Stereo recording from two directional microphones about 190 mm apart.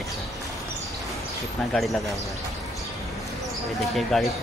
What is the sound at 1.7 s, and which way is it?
Speech, centre (ahead or behind).